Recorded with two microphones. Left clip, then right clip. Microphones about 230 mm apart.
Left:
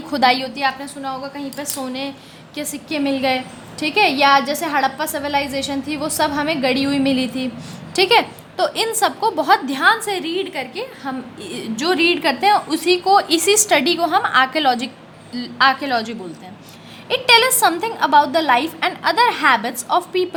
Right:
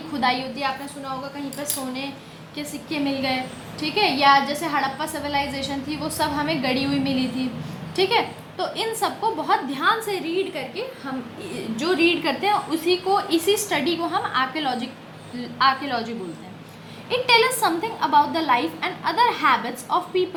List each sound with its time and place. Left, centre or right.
0.1 s a woman's voice: left